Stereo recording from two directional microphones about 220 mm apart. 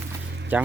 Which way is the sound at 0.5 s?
5° right (ahead or behind).